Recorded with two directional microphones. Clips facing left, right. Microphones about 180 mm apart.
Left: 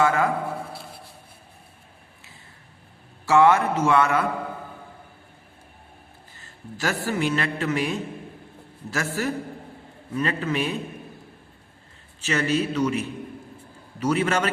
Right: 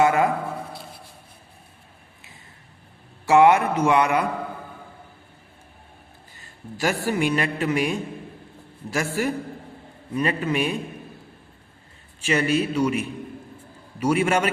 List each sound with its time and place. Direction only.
0.0 s speech: 20° right (ahead or behind)
3.2 s a man's voice: 15° right (ahead or behind)
6.7 s a man's voice: 15° right (ahead or behind)
12.2 s a man's voice: 10° right (ahead or behind)